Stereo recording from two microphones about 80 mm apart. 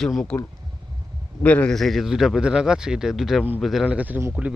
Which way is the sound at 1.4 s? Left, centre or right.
Centre.